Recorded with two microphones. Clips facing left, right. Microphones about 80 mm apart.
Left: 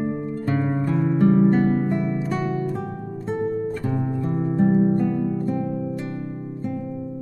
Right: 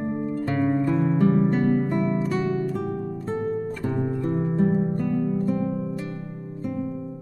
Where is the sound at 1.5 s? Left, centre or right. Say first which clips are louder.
Left 2 dB; centre.